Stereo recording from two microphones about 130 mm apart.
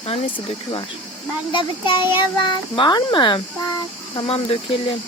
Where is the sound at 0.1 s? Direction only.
50° left (ahead or behind).